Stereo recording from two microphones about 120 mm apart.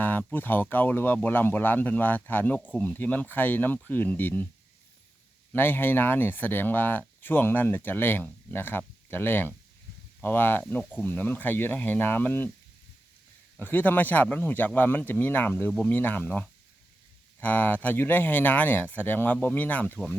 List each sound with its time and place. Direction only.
0.0 s speech: 15° left (ahead or behind)
5.5 s speech: 15° left (ahead or behind)
13.6 s speech: 15° left (ahead or behind)